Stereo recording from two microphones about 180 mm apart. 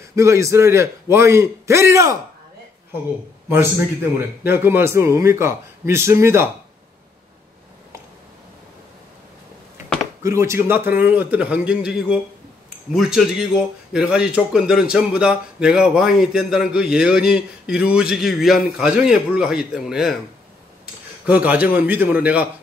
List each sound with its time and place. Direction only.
0.1 s a man's voice: 15° right (ahead or behind)
3.4 s a man's voice: 15° right (ahead or behind)
10.2 s a man's voice: 15° right (ahead or behind)
21.3 s a man's voice: 10° right (ahead or behind)